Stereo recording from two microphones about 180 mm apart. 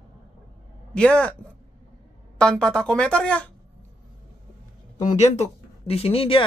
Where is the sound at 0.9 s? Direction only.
5° left (ahead or behind).